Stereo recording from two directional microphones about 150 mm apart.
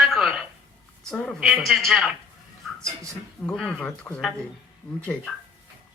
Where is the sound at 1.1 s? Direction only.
Centre (ahead or behind).